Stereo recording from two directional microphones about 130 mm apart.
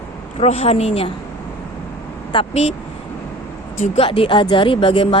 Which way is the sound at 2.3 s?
35° left (ahead or behind).